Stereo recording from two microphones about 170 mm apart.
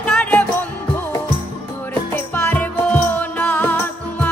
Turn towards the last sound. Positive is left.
turn(degrees=10)  # may be behind; listen again after turning